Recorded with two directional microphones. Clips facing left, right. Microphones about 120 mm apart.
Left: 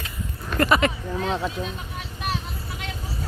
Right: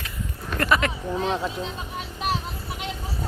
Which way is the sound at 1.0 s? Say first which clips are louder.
Right 1 dB; 20° right (ahead or behind).